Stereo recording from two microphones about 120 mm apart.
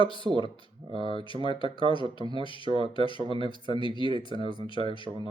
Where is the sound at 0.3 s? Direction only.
40° right (ahead or behind).